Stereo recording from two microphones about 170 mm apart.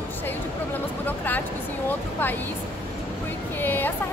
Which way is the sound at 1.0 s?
10° left (ahead or behind).